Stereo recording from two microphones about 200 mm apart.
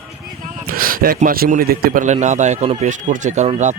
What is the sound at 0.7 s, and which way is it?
A man's voice, 45° right (ahead or behind).